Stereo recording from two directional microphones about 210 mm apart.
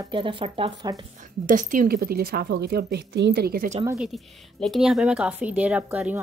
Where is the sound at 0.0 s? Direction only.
25° right (ahead or behind).